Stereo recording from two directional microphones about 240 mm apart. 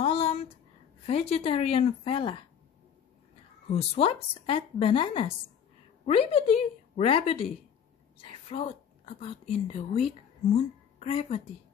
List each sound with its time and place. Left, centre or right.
0.0 s a sound: left
1.0 s a woman's voice: left
3.6 s a woman's voice: left